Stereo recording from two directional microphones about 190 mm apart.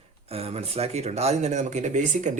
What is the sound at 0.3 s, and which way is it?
Speech, 30° right (ahead or behind).